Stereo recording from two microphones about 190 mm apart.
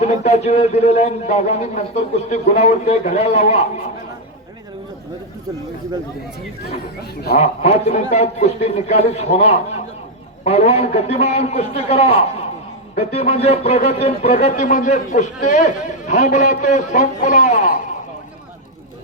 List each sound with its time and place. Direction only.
0.3 s a man's voice: 35° left (ahead or behind)
7.3 s a man's voice: 35° left (ahead or behind)